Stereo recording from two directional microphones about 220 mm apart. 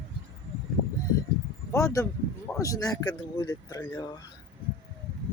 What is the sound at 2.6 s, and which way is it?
Speech, 15° left (ahead or behind).